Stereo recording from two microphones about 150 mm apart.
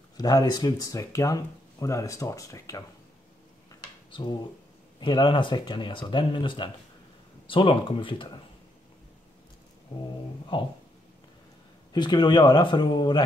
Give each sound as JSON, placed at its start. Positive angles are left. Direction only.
{"t": 0.2, "sound": "speech", "side_deg": 25}
{"t": 4.1, "sound": "speech", "side_deg": 35}
{"t": 10.5, "sound": "speech", "side_deg": 35}
{"t": 11.9, "sound": "speech", "side_deg": 30}